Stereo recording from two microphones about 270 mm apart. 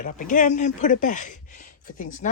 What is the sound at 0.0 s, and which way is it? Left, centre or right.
Speech, left.